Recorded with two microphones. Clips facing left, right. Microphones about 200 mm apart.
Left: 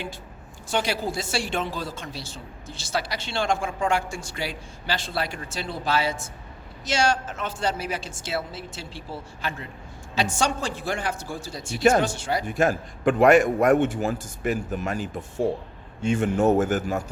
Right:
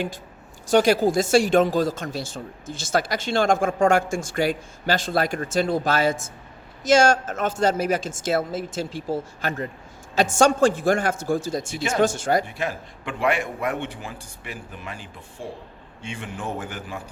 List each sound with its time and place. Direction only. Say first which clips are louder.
0.7 s speech: right 9 dB; 45° right (ahead or behind)
12.5 s a man's voice: left 6 dB; 45° left (ahead or behind)